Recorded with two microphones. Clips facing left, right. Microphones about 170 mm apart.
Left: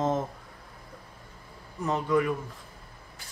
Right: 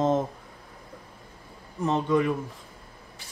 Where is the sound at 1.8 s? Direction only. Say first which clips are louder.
Right 2 dB; 25° right (ahead or behind).